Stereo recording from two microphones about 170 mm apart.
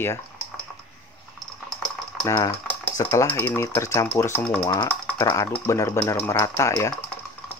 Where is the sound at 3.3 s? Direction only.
15° left (ahead or behind).